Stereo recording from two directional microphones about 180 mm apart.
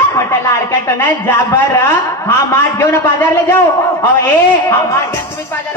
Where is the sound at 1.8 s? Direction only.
15° left (ahead or behind).